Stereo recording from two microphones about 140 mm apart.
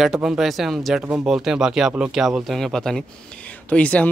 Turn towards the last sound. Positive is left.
turn(degrees=10)  # may be behind; listen again after turning